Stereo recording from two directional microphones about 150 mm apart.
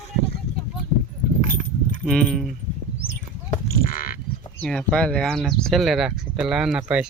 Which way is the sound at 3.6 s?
70° left (ahead or behind).